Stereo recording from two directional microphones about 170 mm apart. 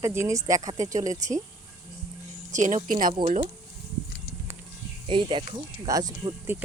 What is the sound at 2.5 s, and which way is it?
Speech, 45° right (ahead or behind).